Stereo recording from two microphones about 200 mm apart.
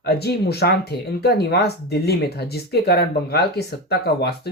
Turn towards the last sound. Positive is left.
turn(degrees=55)  # may be behind; listen again after turning